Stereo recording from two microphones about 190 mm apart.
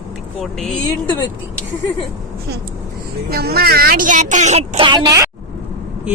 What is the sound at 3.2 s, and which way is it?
Speech, 55° right (ahead or behind).